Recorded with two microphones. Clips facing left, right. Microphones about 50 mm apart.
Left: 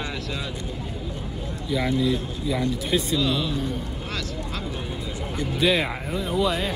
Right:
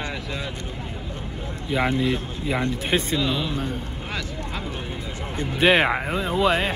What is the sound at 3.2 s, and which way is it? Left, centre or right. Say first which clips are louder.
Speech: even; centre.